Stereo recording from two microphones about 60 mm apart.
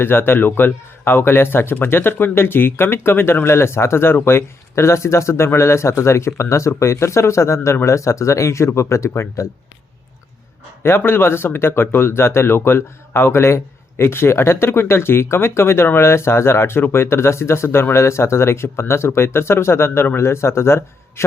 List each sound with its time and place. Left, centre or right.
0.0 s a man's voice: left
10.8 s a man's voice: left